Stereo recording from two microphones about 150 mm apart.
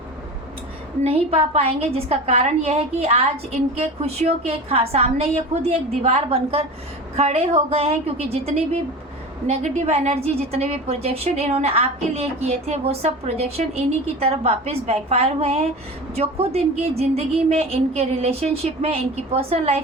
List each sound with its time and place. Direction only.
1.0 s a woman's voice: 40° right (ahead or behind)